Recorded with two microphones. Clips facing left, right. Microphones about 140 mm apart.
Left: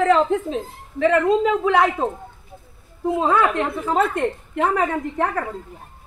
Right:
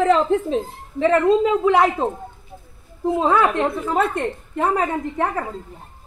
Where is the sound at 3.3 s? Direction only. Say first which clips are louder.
Even; 30° right (ahead or behind).